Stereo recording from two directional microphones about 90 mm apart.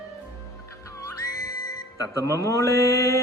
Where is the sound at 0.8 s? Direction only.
35° left (ahead or behind).